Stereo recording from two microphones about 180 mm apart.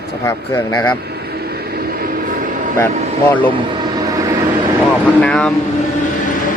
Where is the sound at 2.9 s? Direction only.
40° right (ahead or behind).